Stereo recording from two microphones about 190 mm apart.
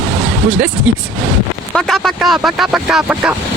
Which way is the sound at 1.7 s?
Centre (ahead or behind).